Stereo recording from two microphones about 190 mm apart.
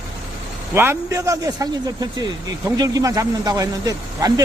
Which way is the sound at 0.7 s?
10° right (ahead or behind).